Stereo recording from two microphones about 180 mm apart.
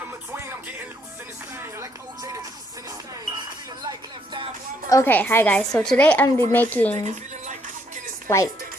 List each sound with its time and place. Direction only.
1.5 s music: 15° right (ahead or behind)
3.8 s music: 25° right (ahead or behind)
4.9 s a woman's voice: 15° left (ahead or behind)
6.9 s speech: 40° right (ahead or behind)
8.3 s a woman's voice: 15° left (ahead or behind)